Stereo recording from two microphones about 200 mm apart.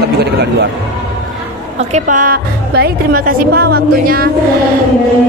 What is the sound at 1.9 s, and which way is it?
A woman's voice, 40° right (ahead or behind).